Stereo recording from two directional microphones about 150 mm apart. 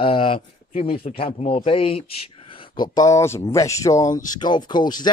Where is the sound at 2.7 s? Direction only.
25° left (ahead or behind).